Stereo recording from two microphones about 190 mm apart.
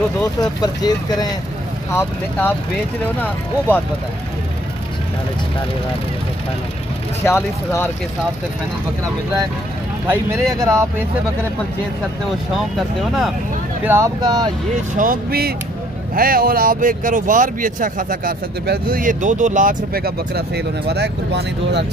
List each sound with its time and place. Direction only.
0.4 s speech: 20° left (ahead or behind)
7.2 s speech: 15° left (ahead or behind)
10.3 s speech: 15° right (ahead or behind)
12.3 s speech: centre (ahead or behind)
13.8 s speech: 15° right (ahead or behind)
15.0 s speech: 50° right (ahead or behind)